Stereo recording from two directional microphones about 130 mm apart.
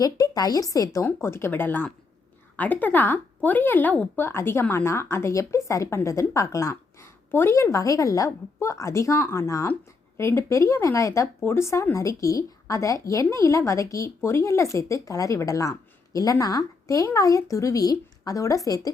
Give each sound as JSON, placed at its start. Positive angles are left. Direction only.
{"t": 0.0, "sound": "speech", "side_deg": 30}